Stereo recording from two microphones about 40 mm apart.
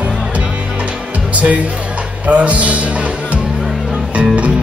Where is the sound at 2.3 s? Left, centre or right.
Right.